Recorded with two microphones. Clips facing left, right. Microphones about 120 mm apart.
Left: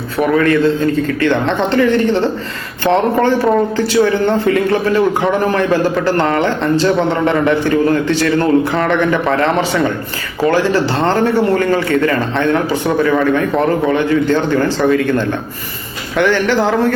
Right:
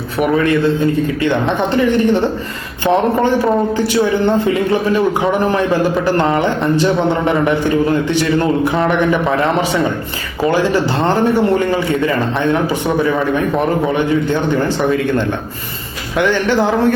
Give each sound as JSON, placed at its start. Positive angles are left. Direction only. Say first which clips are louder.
{"t": 0.2, "sound": "a man's voice", "louder": "left 1 dB", "side_deg": -20}
{"t": 16.1, "sound": "a man's voice", "louder": "left 1 dB", "side_deg": -20}